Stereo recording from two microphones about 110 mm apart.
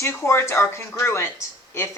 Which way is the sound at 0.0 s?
25° left (ahead or behind).